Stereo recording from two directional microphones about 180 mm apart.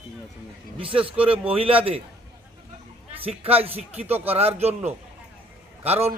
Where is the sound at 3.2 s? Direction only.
35° right (ahead or behind).